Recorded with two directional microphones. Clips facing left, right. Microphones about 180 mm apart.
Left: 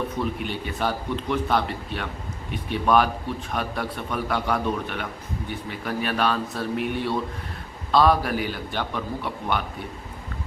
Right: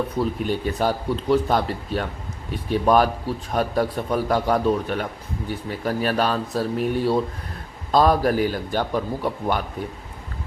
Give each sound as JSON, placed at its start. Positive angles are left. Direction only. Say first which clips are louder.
{"t": 0.2, "sound": "speech", "louder": "right 5 dB", "side_deg": -40}